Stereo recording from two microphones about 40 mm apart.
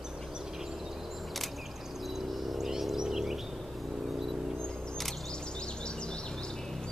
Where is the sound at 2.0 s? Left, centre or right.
Centre.